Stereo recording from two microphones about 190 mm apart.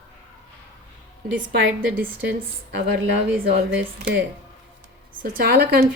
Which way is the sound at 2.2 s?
55° right (ahead or behind).